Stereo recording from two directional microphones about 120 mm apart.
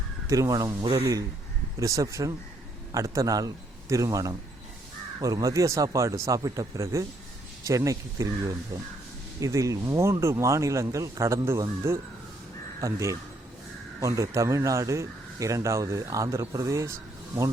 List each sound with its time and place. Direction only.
0.3 s a man's voice: 30° right (ahead or behind)